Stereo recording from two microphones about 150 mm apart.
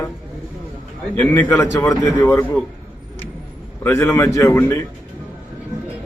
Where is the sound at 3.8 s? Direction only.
20° left (ahead or behind).